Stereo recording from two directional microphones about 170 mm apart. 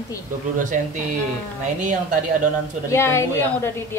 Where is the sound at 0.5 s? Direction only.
50° right (ahead or behind).